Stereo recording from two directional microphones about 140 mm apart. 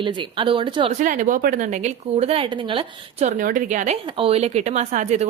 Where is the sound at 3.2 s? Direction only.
70° right (ahead or behind).